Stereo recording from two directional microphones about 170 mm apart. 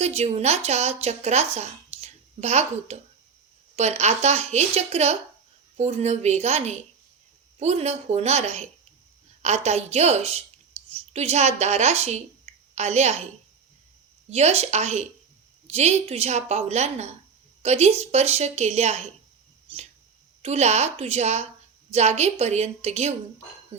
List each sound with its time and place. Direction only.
0.0 s a woman's voice: 40° right (ahead or behind)
14.3 s a woman's voice: 40° right (ahead or behind)
20.4 s a woman's voice: 40° right (ahead or behind)